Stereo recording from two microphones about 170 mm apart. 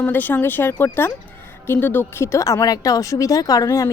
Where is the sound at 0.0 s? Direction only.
10° left (ahead or behind).